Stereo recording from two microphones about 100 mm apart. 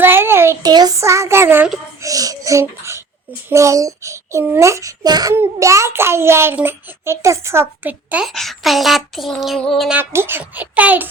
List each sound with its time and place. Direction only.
0.0 s a sound: 20° right (ahead or behind)
0.6 s a child's voice: 40° right (ahead or behind)
0.9 s a child's voice: 30° right (ahead or behind)
2.0 s a child's voice: 35° right (ahead or behind)
5.3 s a child's voice: 25° right (ahead or behind)
8.1 s a sound: 5° right (ahead or behind)
9.9 s a child's voice: 25° right (ahead or behind)